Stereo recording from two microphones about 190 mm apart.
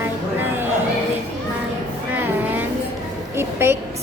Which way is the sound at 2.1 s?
10° right (ahead or behind).